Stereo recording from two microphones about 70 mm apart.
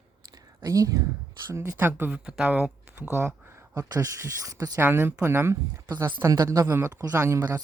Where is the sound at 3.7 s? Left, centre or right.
Right.